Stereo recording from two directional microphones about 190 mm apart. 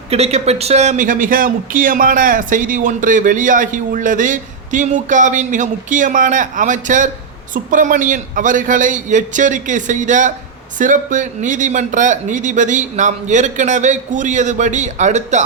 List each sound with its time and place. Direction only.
0.1 s a man's voice: 35° right (ahead or behind)